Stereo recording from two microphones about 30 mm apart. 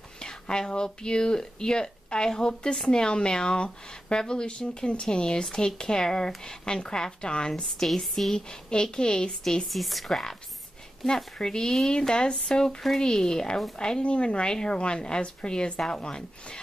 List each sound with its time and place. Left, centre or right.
0.2 s speech: left
7.8 s speech: centre
8.6 s speech: left
9.7 s a woman's voice: centre
11.3 s a woman's voice: left
14.0 s a woman's voice: left
14.5 s a woman's voice: left